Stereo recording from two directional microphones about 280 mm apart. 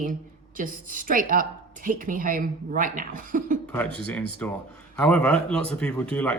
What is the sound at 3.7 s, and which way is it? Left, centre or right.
Speech, centre.